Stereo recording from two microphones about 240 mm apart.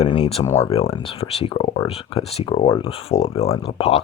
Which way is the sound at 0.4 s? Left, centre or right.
Centre.